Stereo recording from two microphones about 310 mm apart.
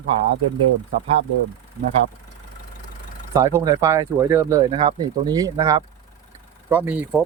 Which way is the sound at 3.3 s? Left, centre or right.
Centre.